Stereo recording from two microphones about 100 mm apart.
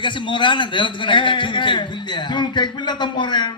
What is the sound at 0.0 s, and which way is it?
A man's voice, 55° left (ahead or behind).